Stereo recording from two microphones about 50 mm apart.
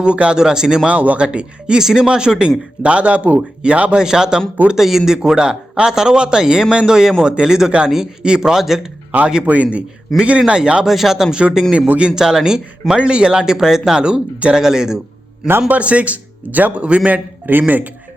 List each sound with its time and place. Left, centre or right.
0.0 s a man's voice: right
0.9 s a man's voice: right
1.8 s a man's voice: centre
4.0 s a man's voice: centre
9.5 s a man's voice: right
10.8 s a man's voice: centre
15.6 s a man's voice: right
17.4 s speech: right